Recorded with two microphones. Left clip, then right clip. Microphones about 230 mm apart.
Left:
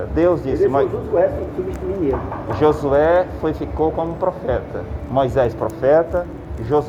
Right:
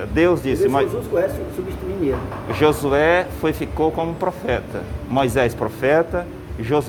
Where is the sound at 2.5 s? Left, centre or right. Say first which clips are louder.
Left 1 dB; right.